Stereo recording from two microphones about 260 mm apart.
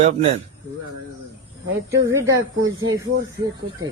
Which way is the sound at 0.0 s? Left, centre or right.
Right.